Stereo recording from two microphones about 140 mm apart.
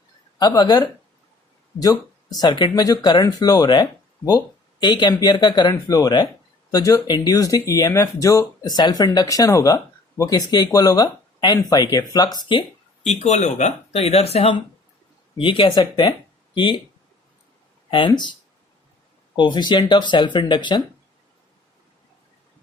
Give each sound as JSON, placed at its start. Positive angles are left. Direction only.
{"t": 0.3, "sound": "speech", "side_deg": 30}
{"t": 13.1, "sound": "speech", "side_deg": 55}
{"t": 17.9, "sound": "speech", "side_deg": 35}
{"t": 19.4, "sound": "speech", "side_deg": 35}